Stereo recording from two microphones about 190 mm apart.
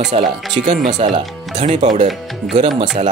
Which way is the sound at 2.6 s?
30° right (ahead or behind).